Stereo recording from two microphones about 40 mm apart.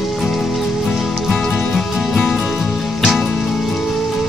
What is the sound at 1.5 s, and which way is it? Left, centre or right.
Music, left.